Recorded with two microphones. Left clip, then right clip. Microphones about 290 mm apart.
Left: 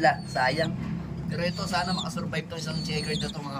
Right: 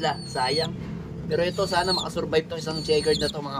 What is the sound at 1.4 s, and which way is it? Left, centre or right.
Speech, centre.